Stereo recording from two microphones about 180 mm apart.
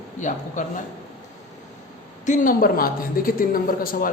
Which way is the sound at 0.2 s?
45° left (ahead or behind).